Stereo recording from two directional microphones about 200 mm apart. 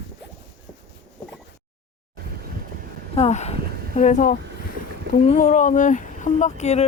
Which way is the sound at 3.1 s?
30° left (ahead or behind).